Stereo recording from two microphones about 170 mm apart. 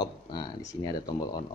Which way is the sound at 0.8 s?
25° left (ahead or behind).